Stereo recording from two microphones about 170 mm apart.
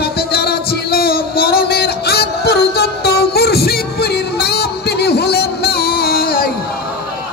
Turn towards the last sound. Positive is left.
turn(degrees=60)  # may be behind; listen again after turning